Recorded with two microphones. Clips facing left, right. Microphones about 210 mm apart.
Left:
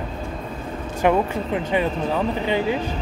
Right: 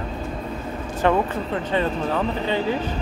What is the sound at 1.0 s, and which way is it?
Speech, 15° left (ahead or behind).